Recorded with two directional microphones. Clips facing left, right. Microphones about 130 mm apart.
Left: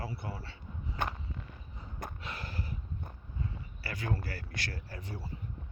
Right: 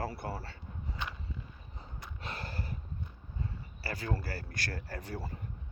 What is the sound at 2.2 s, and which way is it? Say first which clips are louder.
Gasp: even; 30° right (ahead or behind).